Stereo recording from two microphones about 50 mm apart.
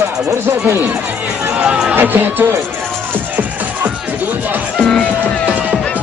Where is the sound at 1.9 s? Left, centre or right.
Right.